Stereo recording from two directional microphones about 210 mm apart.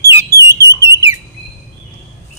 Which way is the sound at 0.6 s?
15° right (ahead or behind).